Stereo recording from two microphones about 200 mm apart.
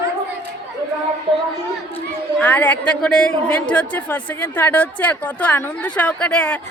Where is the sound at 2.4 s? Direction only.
10° left (ahead or behind).